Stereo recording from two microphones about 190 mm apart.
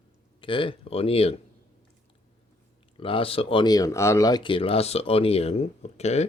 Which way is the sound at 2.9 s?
30° left (ahead or behind).